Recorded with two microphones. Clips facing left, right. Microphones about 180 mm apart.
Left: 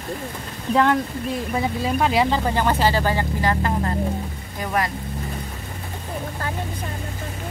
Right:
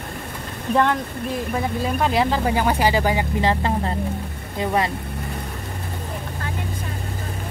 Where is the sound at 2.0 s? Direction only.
Centre (ahead or behind).